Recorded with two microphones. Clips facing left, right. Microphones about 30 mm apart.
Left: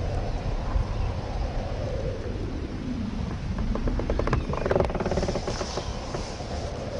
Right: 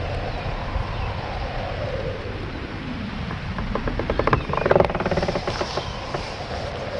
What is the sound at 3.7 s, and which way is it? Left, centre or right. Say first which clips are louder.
Vehicle: right 5 dB; right.